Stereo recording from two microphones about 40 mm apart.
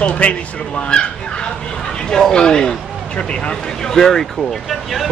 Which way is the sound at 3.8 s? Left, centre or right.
Centre.